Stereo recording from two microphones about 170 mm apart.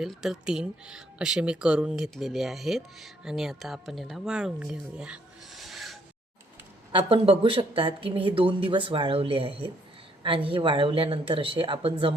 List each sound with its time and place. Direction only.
0.0 s speech: centre (ahead or behind)
6.9 s speech: 30° right (ahead or behind)